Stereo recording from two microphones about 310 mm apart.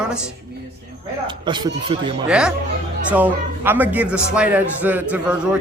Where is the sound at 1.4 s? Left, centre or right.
Centre.